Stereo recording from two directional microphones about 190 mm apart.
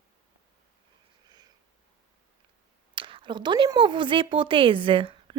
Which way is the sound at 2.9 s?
25° right (ahead or behind).